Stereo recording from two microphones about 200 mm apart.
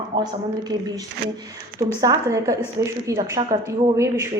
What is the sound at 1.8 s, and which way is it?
A woman's voice, 15° right (ahead or behind).